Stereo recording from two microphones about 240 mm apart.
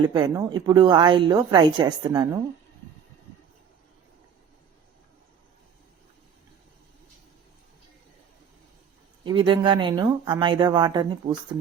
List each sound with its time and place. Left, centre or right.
0.1 s a woman's voice: centre
9.2 s speech: centre